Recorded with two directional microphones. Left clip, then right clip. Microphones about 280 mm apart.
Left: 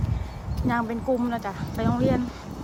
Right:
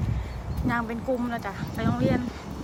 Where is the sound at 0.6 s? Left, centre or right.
Centre.